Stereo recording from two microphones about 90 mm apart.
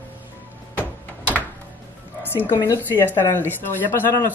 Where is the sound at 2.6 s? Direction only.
30° left (ahead or behind).